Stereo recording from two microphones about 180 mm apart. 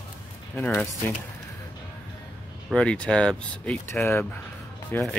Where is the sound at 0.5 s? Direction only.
10° left (ahead or behind).